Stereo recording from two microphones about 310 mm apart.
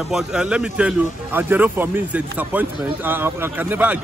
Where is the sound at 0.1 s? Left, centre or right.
Centre.